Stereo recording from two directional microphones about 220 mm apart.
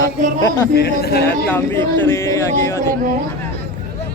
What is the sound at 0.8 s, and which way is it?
Speech, 45° left (ahead or behind).